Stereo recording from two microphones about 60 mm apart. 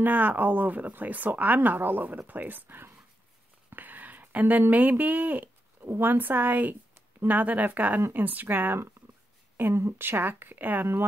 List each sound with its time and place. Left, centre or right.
0.0 s speech: right
3.7 s a sound: right
5.9 s speech: right
9.6 s speech: right